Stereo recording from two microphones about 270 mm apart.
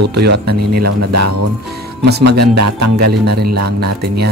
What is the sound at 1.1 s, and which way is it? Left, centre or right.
Speech, right.